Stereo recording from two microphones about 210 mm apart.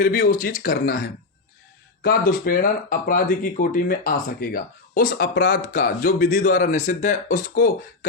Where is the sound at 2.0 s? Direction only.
45° left (ahead or behind).